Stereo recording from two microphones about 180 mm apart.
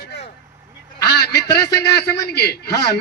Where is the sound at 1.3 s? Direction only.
20° left (ahead or behind).